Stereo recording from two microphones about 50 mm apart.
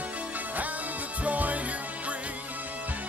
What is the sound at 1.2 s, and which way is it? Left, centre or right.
Music, right.